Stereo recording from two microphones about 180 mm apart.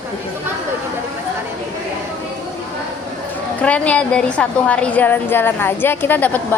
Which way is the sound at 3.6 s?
5° left (ahead or behind).